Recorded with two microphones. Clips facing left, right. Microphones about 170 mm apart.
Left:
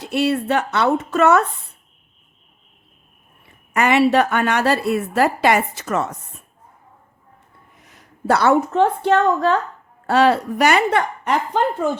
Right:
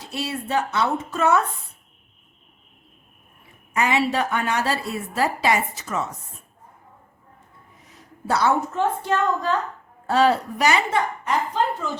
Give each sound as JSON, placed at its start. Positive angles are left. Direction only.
{"t": 0.0, "sound": "a woman's voice", "side_deg": 65}
{"t": 3.7, "sound": "a woman's voice", "side_deg": 65}
{"t": 7.9, "sound": "a woman's voice", "side_deg": 70}